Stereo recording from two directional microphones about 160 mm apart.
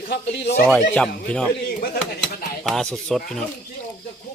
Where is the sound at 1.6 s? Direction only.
70° left (ahead or behind).